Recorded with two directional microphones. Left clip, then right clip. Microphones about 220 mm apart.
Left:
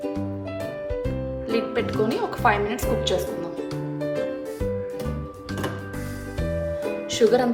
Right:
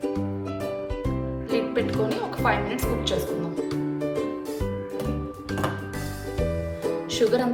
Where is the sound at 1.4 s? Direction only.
30° left (ahead or behind).